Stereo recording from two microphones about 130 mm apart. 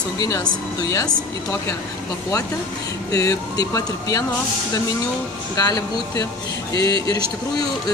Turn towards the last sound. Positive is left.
turn(degrees=30)  # may be behind; listen again after turning